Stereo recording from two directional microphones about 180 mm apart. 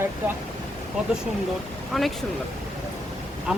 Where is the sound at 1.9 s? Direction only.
Centre (ahead or behind).